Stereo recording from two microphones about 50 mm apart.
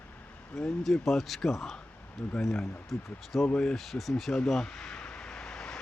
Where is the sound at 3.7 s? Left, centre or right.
Centre.